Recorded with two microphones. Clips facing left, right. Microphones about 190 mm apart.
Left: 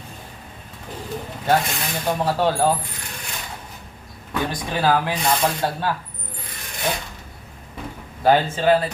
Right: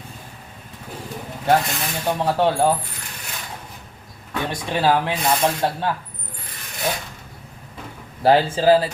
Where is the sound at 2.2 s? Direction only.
25° right (ahead or behind).